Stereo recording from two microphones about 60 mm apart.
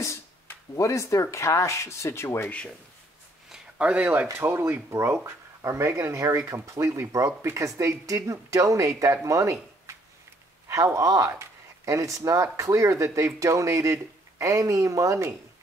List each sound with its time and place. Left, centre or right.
0.7 s speech: left
3.7 s speech: right
4.3 s speech: right
5.0 s speech: right